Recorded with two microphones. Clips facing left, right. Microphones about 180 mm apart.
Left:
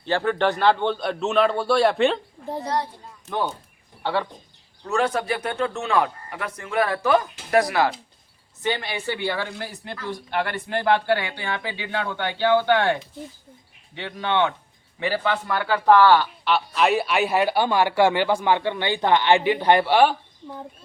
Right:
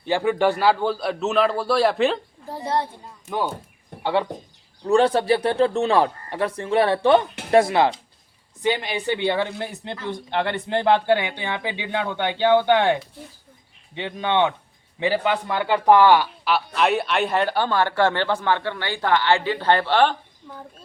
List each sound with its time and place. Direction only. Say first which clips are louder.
0.0 s a man's voice: right 2 dB; 10° right (ahead or behind)
2.6 s speech: right 2 dB; 25° right (ahead or behind)
3.2 s a man's voice: right 1 dB; 10° right (ahead or behind)
4.9 s a man's voice: right 6 dB; 30° right (ahead or behind)
16.4 s speech: even; 5° right (ahead or behind); by 20.7 s 15° left (ahead or behind)